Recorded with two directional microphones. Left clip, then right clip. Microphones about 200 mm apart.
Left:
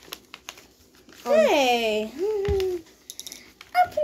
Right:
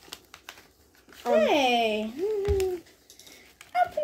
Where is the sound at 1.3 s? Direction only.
40° left (ahead or behind).